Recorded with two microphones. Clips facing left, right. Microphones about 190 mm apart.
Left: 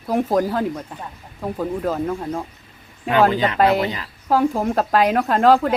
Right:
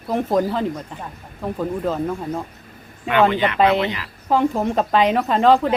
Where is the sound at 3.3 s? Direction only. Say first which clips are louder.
Even; 35° left (ahead or behind).